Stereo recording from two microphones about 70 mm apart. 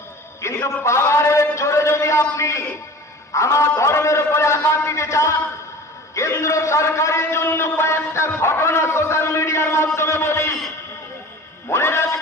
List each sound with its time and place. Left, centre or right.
0.4 s a sound: left
2.4 s a man's voice: left
11.7 s music: left